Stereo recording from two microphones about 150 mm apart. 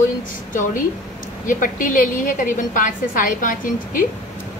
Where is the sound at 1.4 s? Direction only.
65° left (ahead or behind).